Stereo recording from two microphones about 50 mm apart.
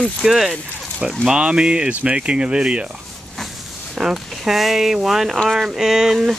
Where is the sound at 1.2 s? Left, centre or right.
Centre.